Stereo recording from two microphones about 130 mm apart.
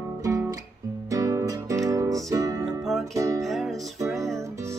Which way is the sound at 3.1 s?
25° right (ahead or behind).